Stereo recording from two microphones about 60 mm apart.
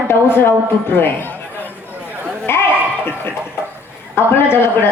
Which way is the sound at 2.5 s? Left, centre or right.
Left.